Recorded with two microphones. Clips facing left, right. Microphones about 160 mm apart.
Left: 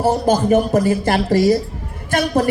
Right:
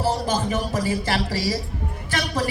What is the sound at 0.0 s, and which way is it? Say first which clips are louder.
A man's voice: left 7 dB; 55° left (ahead or behind).